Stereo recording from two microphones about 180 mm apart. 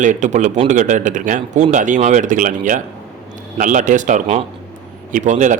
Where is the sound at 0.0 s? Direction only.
45° right (ahead or behind).